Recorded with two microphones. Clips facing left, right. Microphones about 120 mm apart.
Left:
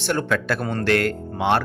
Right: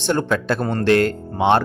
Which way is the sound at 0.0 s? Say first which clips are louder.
Right 3 dB; 20° right (ahead or behind).